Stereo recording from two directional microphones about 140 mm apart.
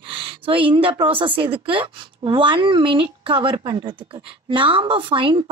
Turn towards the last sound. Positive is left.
turn(degrees=-35)  # may be behind; listen again after turning